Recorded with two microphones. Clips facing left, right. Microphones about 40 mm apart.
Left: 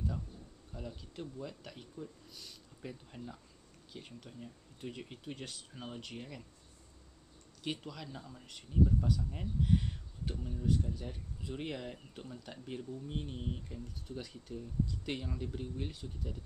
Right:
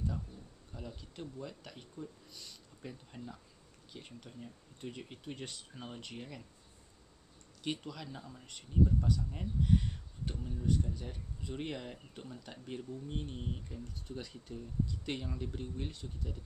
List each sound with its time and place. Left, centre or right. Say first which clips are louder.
0.7 s speech: left 1 dB; centre
7.6 s speech: right 1 dB; centre